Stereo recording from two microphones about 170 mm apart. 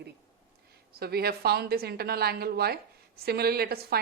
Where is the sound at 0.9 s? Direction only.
65° right (ahead or behind).